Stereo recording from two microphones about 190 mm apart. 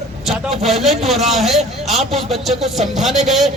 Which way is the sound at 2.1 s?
30° right (ahead or behind).